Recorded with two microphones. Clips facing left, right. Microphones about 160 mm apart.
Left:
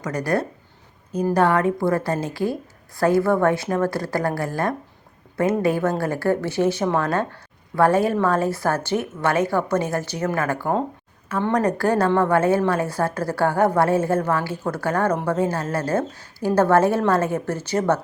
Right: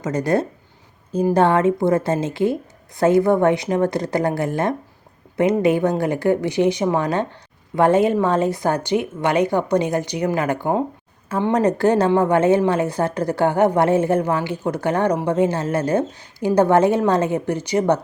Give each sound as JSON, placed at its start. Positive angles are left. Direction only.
{"t": 0.0, "sound": "a woman's voice", "side_deg": -25}